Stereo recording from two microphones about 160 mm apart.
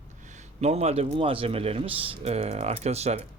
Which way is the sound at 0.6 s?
40° right (ahead or behind).